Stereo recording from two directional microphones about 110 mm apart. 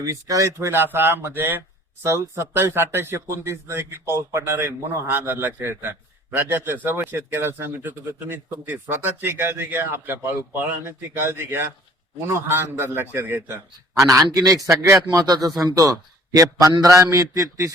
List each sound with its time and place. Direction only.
0.0 s a man's voice: 30° right (ahead or behind)